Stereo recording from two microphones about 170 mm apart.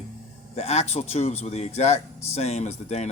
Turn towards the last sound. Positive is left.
turn(degrees=40)  # may be behind; listen again after turning